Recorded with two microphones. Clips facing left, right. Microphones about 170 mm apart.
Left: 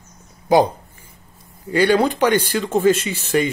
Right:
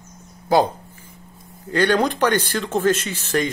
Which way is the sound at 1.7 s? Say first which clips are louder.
Left 3 dB; 10° left (ahead or behind).